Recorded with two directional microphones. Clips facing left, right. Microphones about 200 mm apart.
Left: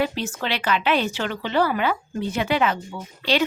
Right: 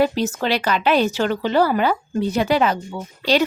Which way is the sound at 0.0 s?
40° right (ahead or behind).